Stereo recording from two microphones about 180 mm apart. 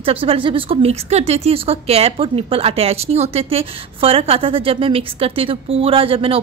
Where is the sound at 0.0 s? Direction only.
30° right (ahead or behind).